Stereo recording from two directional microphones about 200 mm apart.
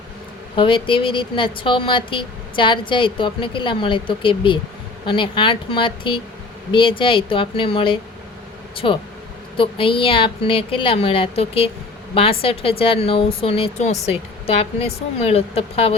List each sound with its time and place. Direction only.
0.5 s speech: 25° left (ahead or behind)